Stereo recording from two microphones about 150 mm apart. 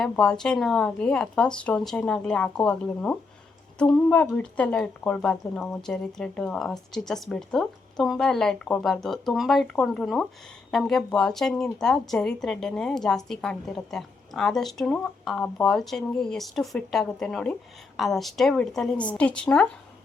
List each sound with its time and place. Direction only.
0.0 s speech: 5° left (ahead or behind)